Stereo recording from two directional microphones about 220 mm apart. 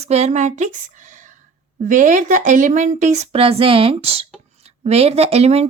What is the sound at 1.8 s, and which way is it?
Speech, 35° right (ahead or behind).